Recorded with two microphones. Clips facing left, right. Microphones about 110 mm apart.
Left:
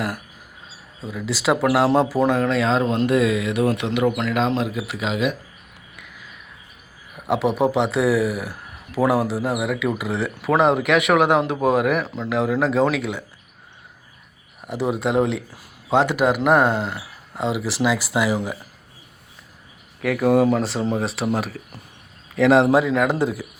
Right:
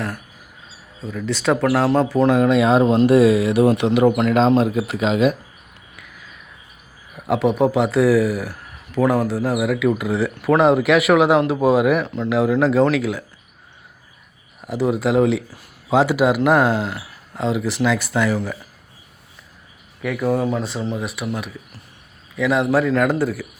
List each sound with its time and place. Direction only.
1.0 s speech: 5° left (ahead or behind)
2.3 s speech: 10° right (ahead or behind)
2.6 s speech: 25° right (ahead or behind); by 5.3 s 40° right (ahead or behind)
7.2 s speech: centre (ahead or behind)
10.7 s speech: 5° right (ahead or behind)
14.7 s speech: centre (ahead or behind); by 18.5 s 15° left (ahead or behind)
20.0 s speech: 65° left (ahead or behind); by 20.8 s 80° left
21.0 s speech: 30° left (ahead or behind)
22.4 s a man's voice: 90° left
22.7 s speech: 15° left (ahead or behind)